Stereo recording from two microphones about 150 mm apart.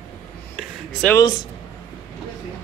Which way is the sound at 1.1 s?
25° left (ahead or behind).